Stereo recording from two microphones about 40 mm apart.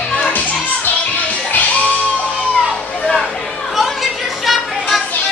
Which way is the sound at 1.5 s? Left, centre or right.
Left.